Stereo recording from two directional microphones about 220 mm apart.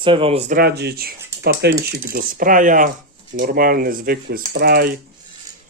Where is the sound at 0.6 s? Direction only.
45° right (ahead or behind).